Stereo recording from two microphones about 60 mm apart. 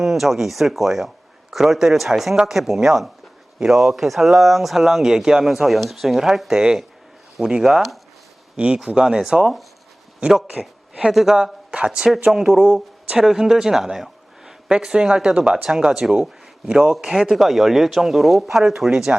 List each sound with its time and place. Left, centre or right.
0.0 s speech: centre
7.6 s speech: centre
8.5 s speech: centre
10.5 s a sound: centre
11.1 s speech: centre